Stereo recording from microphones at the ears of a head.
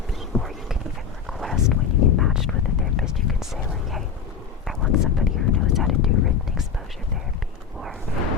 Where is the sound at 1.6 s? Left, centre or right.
Left.